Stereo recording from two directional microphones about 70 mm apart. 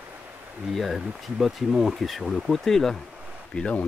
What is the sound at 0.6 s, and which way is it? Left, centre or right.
Speech, centre.